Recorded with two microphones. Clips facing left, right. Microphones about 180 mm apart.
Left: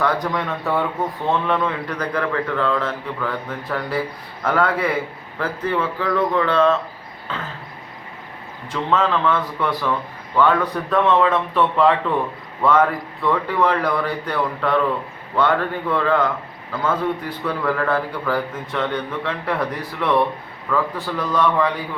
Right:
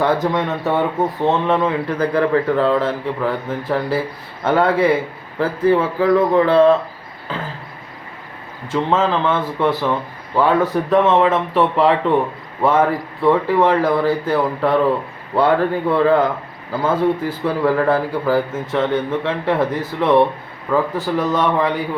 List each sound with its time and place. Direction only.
0.0 s speech: 25° right (ahead or behind)
7.3 s a sound: 35° right (ahead or behind)
8.7 s speech: 25° right (ahead or behind)
20.7 s speech: 30° right (ahead or behind)